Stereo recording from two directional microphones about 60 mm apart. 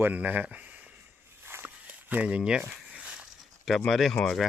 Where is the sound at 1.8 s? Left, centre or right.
Right.